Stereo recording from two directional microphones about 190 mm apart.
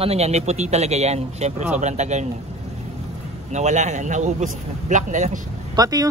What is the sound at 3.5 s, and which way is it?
A man's voice, 35° right (ahead or behind).